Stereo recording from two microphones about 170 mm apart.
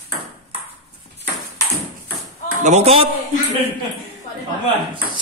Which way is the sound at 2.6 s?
40° right (ahead or behind).